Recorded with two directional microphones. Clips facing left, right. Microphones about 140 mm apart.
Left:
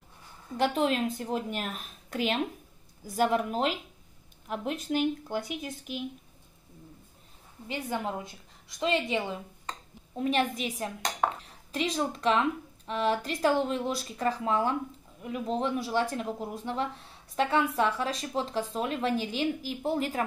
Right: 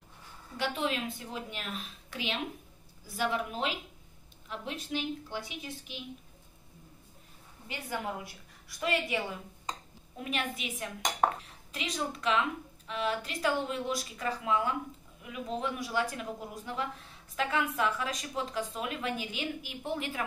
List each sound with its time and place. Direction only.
0.6 s a woman's voice: 45° left (ahead or behind)
7.6 s a woman's voice: 20° left (ahead or behind)
10.1 s a woman's voice: 35° left (ahead or behind)